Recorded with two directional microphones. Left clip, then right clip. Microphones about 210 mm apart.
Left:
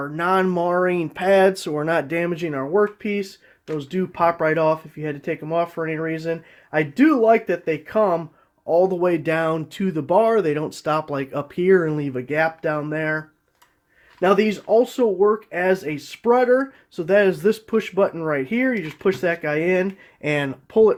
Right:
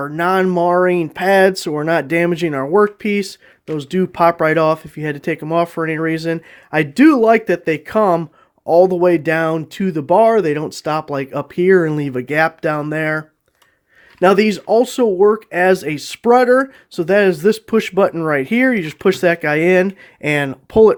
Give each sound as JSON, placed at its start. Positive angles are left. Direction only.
{"t": 0.0, "sound": "speech", "side_deg": -35}